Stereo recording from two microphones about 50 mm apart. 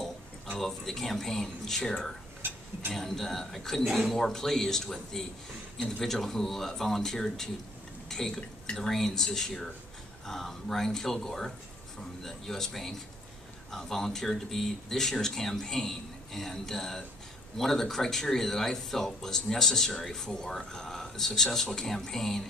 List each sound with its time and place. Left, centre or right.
0.6 s speech: centre
2.4 s stir: right
2.9 s speech: centre